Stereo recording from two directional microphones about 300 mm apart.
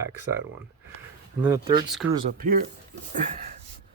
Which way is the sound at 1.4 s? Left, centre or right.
Centre.